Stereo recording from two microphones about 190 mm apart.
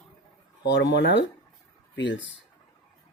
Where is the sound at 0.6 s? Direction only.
70° left (ahead or behind).